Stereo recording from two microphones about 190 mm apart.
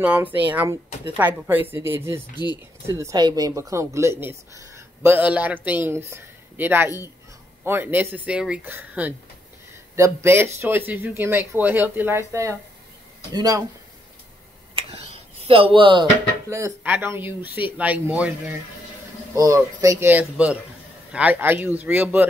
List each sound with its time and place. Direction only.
0.0 s speech: 10° right (ahead or behind)
2.3 s speech: 20° left (ahead or behind)
2.9 s speech: 15° right (ahead or behind)
15.4 s speech: 30° right (ahead or behind); by 18.3 s 5° right (ahead or behind)
19.3 s speech: 15° right (ahead or behind)